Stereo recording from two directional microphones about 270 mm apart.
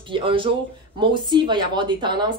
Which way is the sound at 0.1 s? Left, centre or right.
Centre.